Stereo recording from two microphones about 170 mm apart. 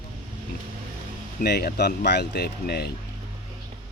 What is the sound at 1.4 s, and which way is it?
Speech, 65° left (ahead or behind).